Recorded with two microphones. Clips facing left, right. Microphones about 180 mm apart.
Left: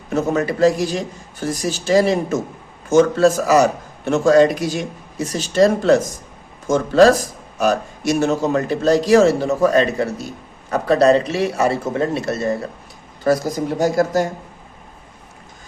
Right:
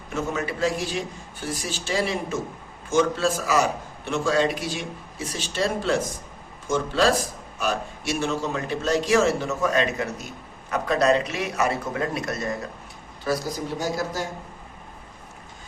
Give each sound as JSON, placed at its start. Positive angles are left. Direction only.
{"t": 0.1, "sound": "a man's voice", "side_deg": 40}
{"t": 13.2, "sound": "a man's voice", "side_deg": 50}